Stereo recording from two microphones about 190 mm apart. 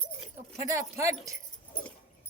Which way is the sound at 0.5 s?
15° right (ahead or behind).